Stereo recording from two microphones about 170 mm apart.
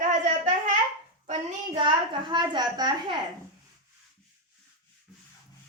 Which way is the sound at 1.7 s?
30° right (ahead or behind).